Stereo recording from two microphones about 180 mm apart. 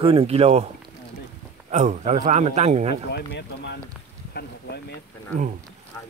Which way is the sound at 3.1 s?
70° left (ahead or behind).